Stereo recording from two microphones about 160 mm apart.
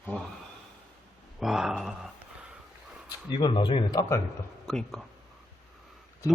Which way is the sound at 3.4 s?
30° left (ahead or behind).